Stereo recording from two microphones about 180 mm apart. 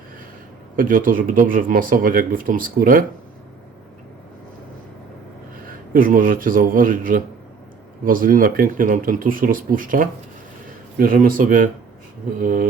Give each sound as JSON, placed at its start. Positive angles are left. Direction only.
{"t": 0.8, "sound": "speech", "side_deg": -50}
{"t": 5.6, "sound": "speech", "side_deg": -50}